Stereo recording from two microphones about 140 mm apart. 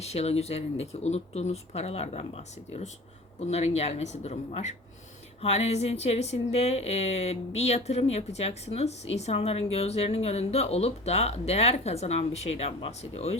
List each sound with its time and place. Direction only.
0.0 s speech: 50° left (ahead or behind)